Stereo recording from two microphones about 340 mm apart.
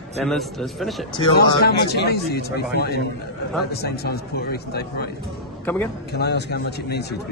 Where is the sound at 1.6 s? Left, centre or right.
Left.